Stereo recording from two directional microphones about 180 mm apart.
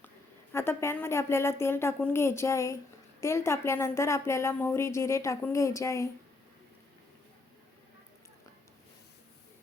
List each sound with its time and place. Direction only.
0.5 s speech: 15° left (ahead or behind)